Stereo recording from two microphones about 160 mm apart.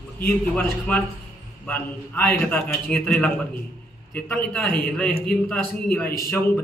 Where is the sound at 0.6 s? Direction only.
10° left (ahead or behind).